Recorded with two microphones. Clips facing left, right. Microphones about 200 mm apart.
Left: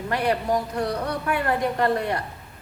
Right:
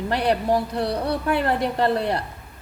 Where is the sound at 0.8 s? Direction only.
30° right (ahead or behind).